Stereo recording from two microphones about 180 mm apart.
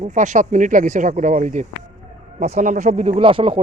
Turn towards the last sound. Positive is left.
turn(degrees=-30)  # may be behind; listen again after turning